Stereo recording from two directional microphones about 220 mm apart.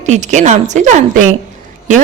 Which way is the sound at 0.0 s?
30° right (ahead or behind).